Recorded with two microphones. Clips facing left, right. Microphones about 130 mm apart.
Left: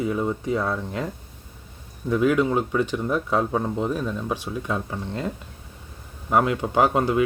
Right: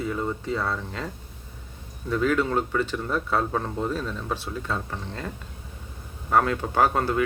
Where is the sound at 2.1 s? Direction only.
15° left (ahead or behind).